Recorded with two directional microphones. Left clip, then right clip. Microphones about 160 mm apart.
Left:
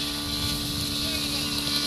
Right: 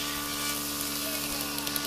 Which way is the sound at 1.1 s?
45° left (ahead or behind).